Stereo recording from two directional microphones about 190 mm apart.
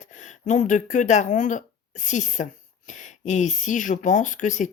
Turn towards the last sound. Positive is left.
turn(degrees=40)  # may be behind; listen again after turning